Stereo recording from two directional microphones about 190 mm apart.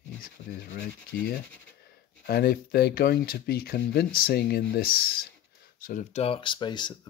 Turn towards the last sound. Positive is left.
turn(degrees=25)  # may be behind; listen again after turning